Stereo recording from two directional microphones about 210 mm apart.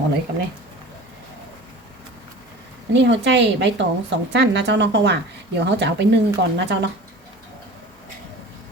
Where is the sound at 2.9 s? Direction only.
60° right (ahead or behind).